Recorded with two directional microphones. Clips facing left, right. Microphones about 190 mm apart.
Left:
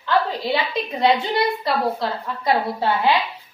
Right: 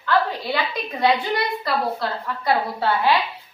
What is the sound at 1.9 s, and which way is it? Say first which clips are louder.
A woman's voice: left 1 dB; 20° left (ahead or behind).